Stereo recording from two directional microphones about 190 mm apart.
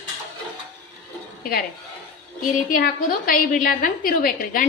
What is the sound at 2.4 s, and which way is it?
A woman's voice, 50° left (ahead or behind).